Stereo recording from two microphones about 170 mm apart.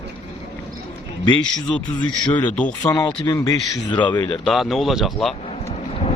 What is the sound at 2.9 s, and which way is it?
Speech, 20° left (ahead or behind).